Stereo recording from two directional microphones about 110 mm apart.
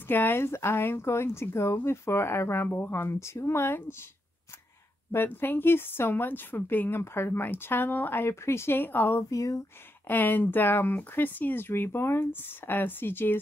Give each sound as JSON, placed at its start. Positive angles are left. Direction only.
{"t": 0.1, "sound": "a woman's voice", "side_deg": 20}
{"t": 5.1, "sound": "a woman's voice", "side_deg": 20}
{"t": 9.3, "sound": "speech", "side_deg": 30}
{"t": 10.0, "sound": "a woman's voice", "side_deg": 15}